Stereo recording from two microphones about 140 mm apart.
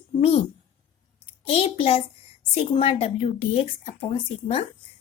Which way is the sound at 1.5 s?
45° left (ahead or behind).